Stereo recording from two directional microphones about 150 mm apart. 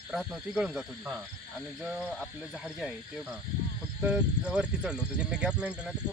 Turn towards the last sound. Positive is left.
turn(degrees=-10)  # may be behind; listen again after turning